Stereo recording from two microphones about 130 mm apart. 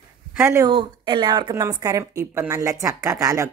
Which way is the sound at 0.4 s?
20° right (ahead or behind).